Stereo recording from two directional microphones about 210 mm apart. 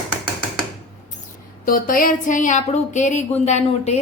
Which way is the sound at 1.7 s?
40° left (ahead or behind).